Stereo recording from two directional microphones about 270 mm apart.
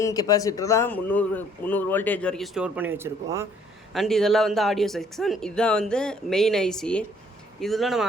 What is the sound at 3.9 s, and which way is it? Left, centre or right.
Speech, centre.